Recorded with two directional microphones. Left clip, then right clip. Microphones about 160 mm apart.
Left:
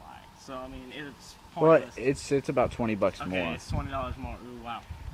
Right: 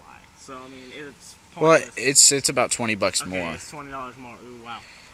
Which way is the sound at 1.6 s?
10° right (ahead or behind).